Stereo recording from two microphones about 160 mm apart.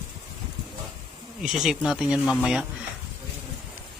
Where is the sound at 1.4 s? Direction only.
Centre (ahead or behind).